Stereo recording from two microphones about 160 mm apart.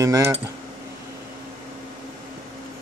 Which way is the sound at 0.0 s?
20° right (ahead or behind).